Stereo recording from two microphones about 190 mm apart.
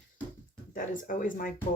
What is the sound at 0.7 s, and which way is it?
Speech, 45° left (ahead or behind).